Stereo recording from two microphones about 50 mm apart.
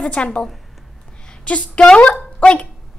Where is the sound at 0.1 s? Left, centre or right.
Left.